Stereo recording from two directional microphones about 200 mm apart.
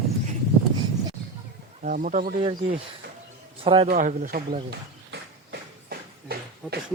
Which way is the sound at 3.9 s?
40° right (ahead or behind).